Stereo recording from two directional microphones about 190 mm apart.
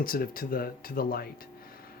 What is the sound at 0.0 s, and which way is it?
Speech, 50° left (ahead or behind).